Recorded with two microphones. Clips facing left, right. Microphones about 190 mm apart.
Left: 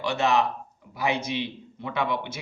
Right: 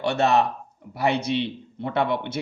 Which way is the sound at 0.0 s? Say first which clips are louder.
Right 3 dB; 60° right (ahead or behind).